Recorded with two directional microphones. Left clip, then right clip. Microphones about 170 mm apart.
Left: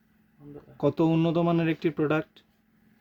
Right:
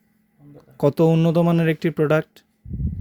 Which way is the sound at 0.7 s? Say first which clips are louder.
Right 6 dB; 50° right (ahead or behind).